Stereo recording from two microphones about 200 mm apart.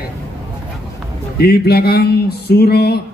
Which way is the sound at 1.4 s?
50° left (ahead or behind).